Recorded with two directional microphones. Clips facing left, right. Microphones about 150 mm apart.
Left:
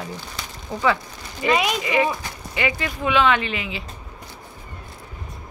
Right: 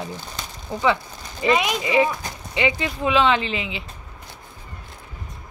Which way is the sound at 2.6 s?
20° right (ahead or behind).